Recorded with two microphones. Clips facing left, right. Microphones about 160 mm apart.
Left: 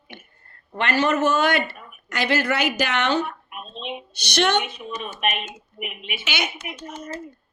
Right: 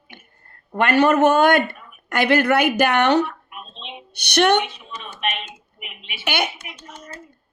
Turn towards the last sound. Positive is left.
turn(degrees=-55)  # may be behind; listen again after turning